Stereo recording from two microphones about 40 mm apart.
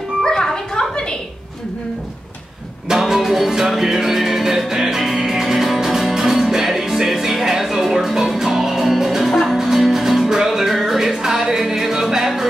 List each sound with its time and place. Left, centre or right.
0.2 s music: centre
2.9 s music: centre